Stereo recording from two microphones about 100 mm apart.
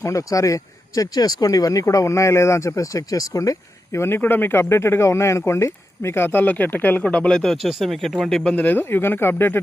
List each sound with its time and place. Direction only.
0.0 s speech: 35° left (ahead or behind); by 8.5 s 5° left (ahead or behind)
8.5 s speech: 20° left (ahead or behind)